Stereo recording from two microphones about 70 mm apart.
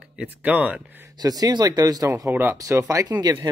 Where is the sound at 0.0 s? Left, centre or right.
Centre.